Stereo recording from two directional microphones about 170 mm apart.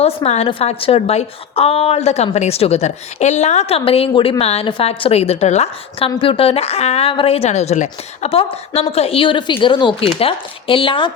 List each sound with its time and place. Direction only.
0.0 s speech: 40° left (ahead or behind)